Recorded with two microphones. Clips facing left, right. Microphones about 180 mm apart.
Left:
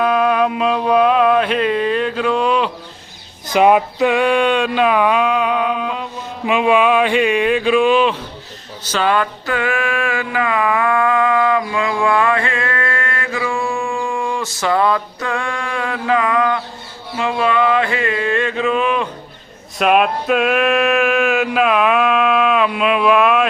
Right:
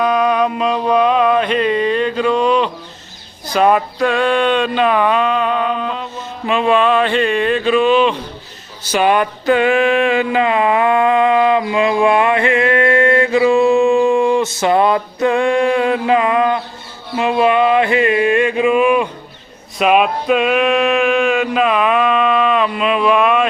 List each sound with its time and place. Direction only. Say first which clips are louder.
0.0 s music: right 1 dB; 5° left (ahead or behind)
3.5 s a sound: left 1 dB; 15° left (ahead or behind)
8.8 s mantra: right 3 dB; 15° right (ahead or behind)
19.8 s music: right 1 dB; centre (ahead or behind)